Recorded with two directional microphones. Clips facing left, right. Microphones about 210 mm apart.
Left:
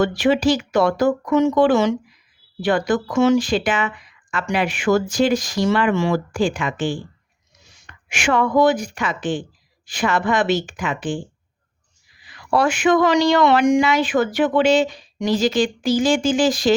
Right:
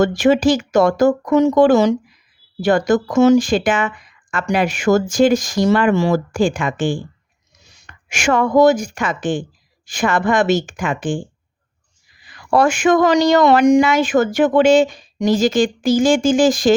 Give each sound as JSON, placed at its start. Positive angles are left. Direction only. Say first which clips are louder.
{"t": 0.0, "sound": "speech", "louder": "right 3 dB", "side_deg": -45}
{"t": 8.1, "sound": "speech", "louder": "right 3 dB", "side_deg": -45}
{"t": 12.2, "sound": "speech", "louder": "right 4 dB", "side_deg": -45}